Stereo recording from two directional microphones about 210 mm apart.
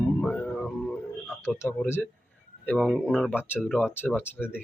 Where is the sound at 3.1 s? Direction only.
5° left (ahead or behind).